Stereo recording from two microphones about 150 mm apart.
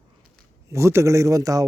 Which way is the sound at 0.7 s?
20° right (ahead or behind).